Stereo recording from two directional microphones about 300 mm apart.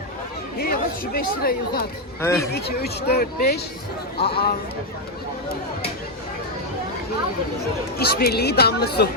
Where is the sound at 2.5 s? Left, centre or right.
Left.